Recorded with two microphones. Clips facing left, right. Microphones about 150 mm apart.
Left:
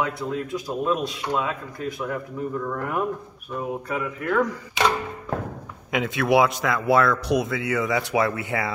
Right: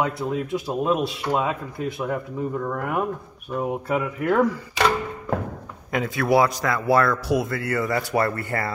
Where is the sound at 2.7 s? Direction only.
10° right (ahead or behind).